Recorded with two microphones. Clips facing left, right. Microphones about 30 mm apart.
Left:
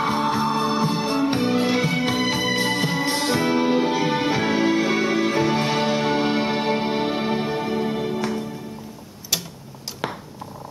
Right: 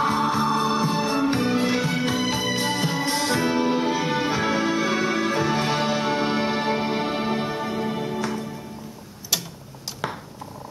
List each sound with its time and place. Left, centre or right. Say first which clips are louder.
0.0 s music: even; centre
9.3 s tick-tock: even; centre
10.0 s a sound: left 1 dB; left